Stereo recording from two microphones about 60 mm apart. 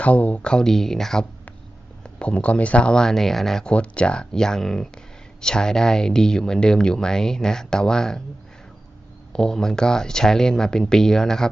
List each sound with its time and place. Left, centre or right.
0.0 s speech: left; by 1.3 s centre
2.0 s speech: centre
3.7 s speech: centre
9.3 s speech: centre